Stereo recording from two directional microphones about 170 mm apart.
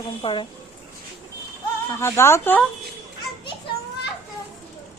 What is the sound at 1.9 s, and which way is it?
Speech, 15° left (ahead or behind).